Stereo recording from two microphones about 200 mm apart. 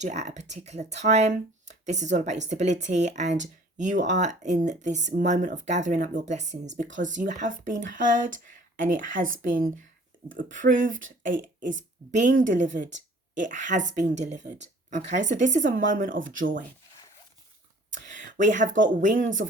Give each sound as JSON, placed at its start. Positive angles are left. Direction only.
{"t": 0.0, "sound": "speech", "side_deg": -35}
{"t": 10.3, "sound": "speech", "side_deg": -40}
{"t": 16.1, "sound": "speech", "side_deg": -70}
{"t": 17.9, "sound": "a sound", "side_deg": -40}
{"t": 19.0, "sound": "speech", "side_deg": -40}